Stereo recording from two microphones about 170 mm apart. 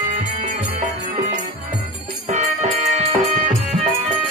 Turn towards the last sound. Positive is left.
turn(degrees=-40)  # may be behind; listen again after turning